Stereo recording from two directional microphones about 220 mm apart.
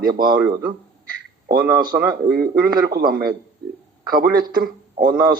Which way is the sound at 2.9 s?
40° right (ahead or behind).